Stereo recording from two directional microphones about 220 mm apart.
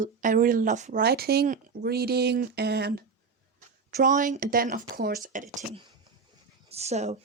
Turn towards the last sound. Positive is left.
turn(degrees=-30)  # may be behind; listen again after turning